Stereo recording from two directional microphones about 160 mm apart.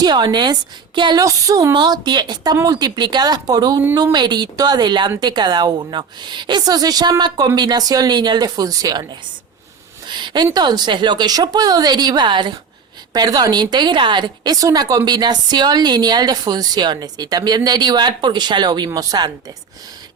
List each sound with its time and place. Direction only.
0.0 s a woman's voice: 25° right (ahead or behind)
10.1 s a woman's voice: 30° right (ahead or behind)